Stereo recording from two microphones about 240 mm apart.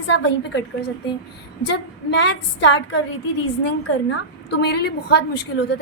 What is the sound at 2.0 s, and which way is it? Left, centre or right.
Speech, left.